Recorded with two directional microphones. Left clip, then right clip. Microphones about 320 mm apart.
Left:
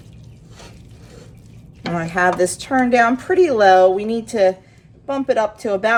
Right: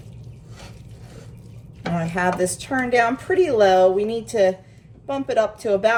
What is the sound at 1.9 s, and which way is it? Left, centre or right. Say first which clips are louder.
A woman's voice: left 5 dB; left.